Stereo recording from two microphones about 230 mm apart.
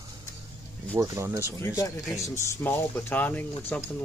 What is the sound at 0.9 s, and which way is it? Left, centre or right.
Speech, centre.